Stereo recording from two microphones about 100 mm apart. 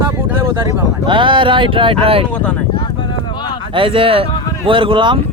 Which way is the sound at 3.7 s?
60° right (ahead or behind).